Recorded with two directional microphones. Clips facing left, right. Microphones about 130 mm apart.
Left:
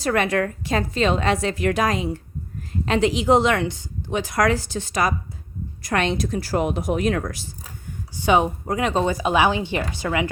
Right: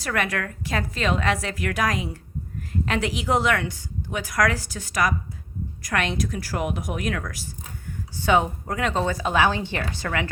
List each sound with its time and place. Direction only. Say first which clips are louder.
0.0 s a woman's voice: left 6 dB; 25° left (ahead or behind)
8.1 s speech: left 2 dB; 15° left (ahead or behind)